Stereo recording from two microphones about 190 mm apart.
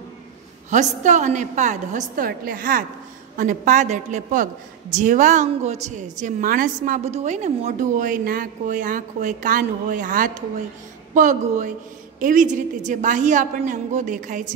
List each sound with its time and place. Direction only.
0.7 s a woman's voice: 40° right (ahead or behind)